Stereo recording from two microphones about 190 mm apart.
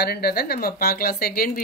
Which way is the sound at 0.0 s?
55° left (ahead or behind).